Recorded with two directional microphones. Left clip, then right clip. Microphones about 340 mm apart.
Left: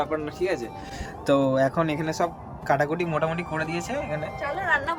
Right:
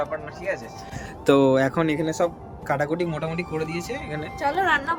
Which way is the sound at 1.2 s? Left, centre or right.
Centre.